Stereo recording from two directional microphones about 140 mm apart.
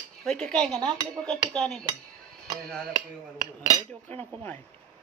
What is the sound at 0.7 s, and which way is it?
Speech, 30° right (ahead or behind).